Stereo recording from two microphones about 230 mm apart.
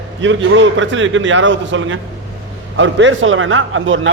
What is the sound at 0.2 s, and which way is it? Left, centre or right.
A man's voice, right.